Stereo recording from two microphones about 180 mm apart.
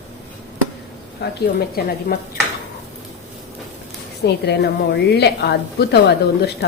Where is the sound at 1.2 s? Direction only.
60° left (ahead or behind).